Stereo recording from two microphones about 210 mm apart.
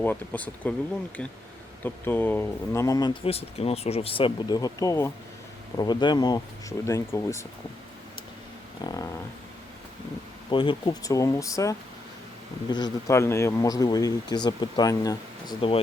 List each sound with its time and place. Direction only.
0.0 s speech: 10° left (ahead or behind)
1.8 s speech: 10° left (ahead or behind)
8.8 s speech: 15° left (ahead or behind)
10.5 s speech: 25° left (ahead or behind)